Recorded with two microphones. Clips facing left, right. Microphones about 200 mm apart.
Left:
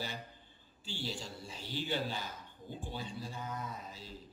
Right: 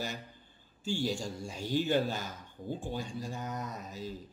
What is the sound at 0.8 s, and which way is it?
A man's voice, 45° right (ahead or behind).